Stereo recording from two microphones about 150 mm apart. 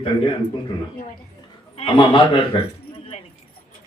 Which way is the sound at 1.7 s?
40° left (ahead or behind).